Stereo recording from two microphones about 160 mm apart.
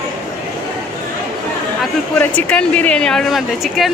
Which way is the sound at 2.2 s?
10° left (ahead or behind).